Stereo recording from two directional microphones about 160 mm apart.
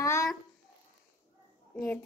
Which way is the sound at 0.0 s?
20° left (ahead or behind).